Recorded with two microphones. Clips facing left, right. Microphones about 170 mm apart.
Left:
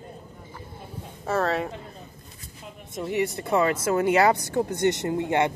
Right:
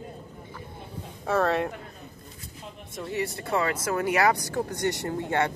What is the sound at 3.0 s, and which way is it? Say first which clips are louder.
Speech: left 5 dB; 20° left (ahead or behind).